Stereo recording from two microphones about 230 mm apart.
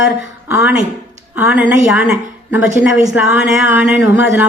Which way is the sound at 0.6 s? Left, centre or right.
Centre.